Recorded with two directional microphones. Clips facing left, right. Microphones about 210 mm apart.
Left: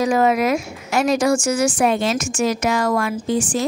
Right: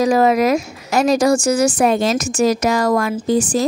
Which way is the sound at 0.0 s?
35° right (ahead or behind).